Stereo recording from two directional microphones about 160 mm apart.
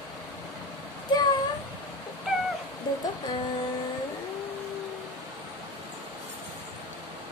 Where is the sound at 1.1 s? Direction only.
25° left (ahead or behind).